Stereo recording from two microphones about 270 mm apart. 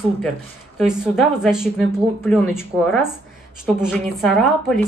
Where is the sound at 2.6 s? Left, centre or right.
Centre.